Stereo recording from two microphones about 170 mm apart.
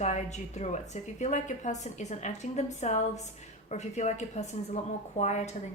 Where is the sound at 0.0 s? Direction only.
40° left (ahead or behind).